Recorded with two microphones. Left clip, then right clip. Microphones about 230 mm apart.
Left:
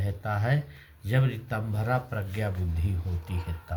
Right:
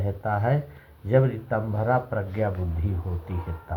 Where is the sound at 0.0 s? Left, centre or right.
Left.